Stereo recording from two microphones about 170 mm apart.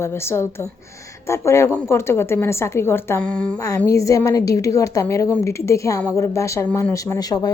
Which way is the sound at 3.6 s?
20° left (ahead or behind).